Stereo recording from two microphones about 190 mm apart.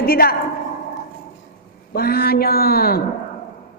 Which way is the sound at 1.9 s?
55° left (ahead or behind).